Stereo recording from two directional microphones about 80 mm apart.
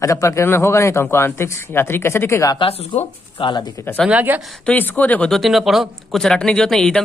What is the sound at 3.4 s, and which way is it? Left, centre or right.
Speech, left.